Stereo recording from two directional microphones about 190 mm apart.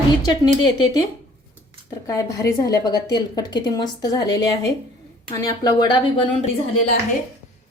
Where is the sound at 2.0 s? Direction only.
15° left (ahead or behind).